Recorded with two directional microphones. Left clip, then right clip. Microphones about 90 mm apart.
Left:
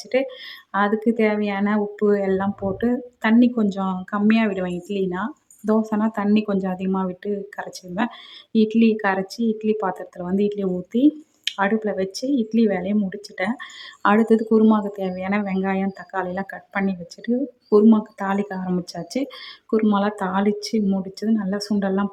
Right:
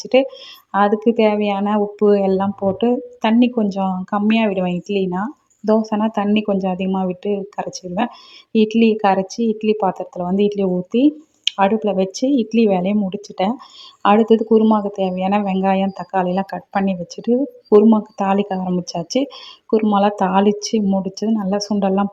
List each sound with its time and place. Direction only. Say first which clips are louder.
0.0 s speech: right 7 dB; 30° right (ahead or behind)
15.4 s speech: right 7 dB; 30° right (ahead or behind)